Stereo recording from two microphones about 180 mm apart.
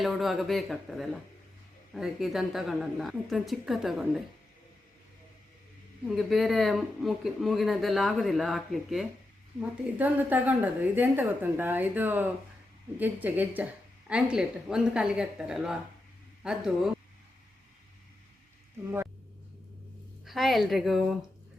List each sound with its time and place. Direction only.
0.0 s speech: centre (ahead or behind)
6.1 s a woman's voice: centre (ahead or behind)
20.2 s speech: centre (ahead or behind)